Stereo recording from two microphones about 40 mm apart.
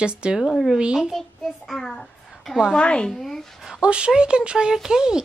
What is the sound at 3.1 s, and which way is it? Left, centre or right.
Speech, centre.